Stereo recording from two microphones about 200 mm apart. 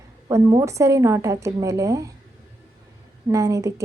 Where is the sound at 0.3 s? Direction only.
15° right (ahead or behind).